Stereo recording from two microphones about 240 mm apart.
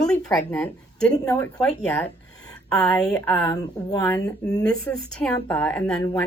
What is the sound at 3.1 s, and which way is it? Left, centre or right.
Speech, centre.